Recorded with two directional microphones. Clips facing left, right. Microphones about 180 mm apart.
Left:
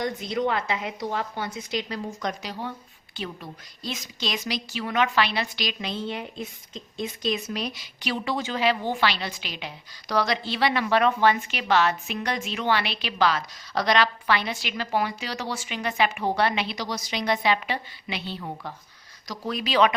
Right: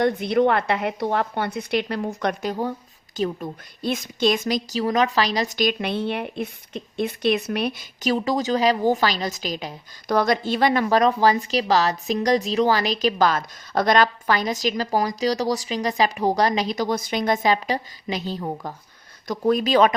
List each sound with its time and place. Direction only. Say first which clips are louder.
0.0 s a woman's voice: right 8 dB; 60° right (ahead or behind); by 19.9 s 45° right (ahead or behind)